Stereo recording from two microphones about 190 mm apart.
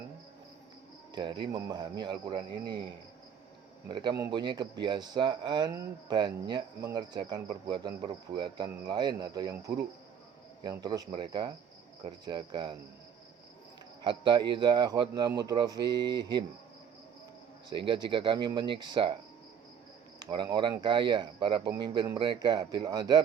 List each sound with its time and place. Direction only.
1.1 s speech: 25° right (ahead or behind)
3.8 s speech: 25° right (ahead or behind)
14.0 s speech: 25° right (ahead or behind)
16.0 s speech: 65° right (ahead or behind)
17.8 s speech: 25° right (ahead or behind)
20.3 s speech: 25° right (ahead or behind)